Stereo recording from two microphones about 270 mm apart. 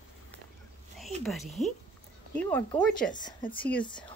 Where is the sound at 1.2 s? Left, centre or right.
Centre.